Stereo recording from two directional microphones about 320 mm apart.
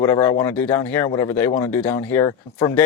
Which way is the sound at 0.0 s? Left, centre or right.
Centre.